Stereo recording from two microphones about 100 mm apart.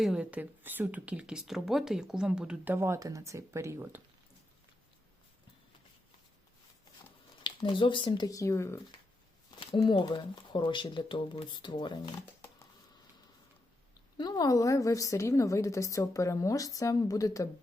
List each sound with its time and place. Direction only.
0.0 s speech: 10° right (ahead or behind)
2.6 s speech: 25° right (ahead or behind)
7.4 s speech: 55° left (ahead or behind)
8.3 s a woman's voice: 30° left (ahead or behind)
9.6 s speech: 55° left (ahead or behind)
14.2 s a woman's voice: 40° left (ahead or behind)